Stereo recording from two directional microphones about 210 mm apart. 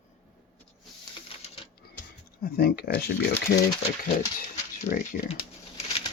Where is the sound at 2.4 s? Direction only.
45° left (ahead or behind).